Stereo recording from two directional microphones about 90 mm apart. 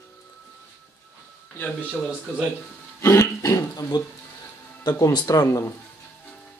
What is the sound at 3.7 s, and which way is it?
Speech, 45° left (ahead or behind).